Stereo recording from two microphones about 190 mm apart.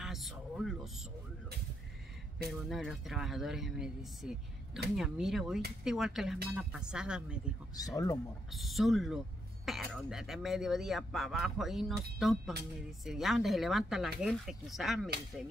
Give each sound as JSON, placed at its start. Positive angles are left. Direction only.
{"t": 0.0, "sound": "a sound", "side_deg": 0}
{"t": 2.3, "sound": "speech", "side_deg": 0}
{"t": 7.7, "sound": "speech", "side_deg": 20}
{"t": 8.5, "sound": "speech", "side_deg": 0}